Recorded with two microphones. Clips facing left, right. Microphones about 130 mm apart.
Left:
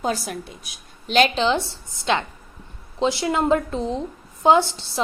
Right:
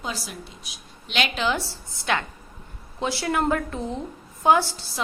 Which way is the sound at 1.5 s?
25° left (ahead or behind).